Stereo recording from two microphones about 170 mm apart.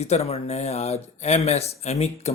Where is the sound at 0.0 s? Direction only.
40° left (ahead or behind).